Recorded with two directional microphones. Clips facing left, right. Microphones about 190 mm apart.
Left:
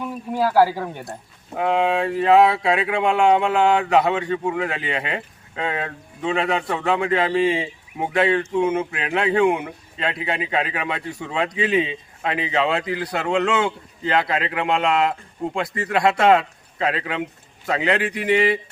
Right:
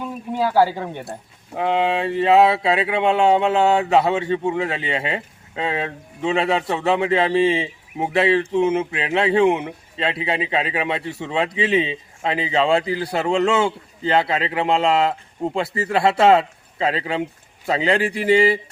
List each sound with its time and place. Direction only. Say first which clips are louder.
0.5 s speech: even; 5° left (ahead or behind)
1.5 s speech: even; 25° right (ahead or behind)